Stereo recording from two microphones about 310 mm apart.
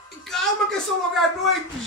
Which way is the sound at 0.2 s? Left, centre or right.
Centre.